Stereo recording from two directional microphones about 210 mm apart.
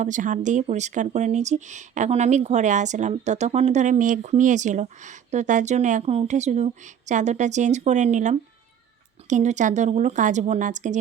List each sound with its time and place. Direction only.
0.0 s speech: 40° right (ahead or behind)